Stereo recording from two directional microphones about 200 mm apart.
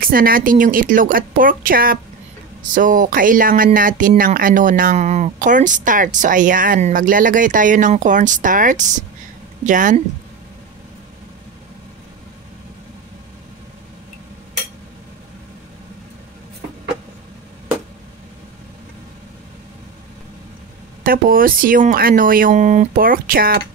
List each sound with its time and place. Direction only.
0.0 s speech: 45° right (ahead or behind)
21.0 s speech: 45° right (ahead or behind)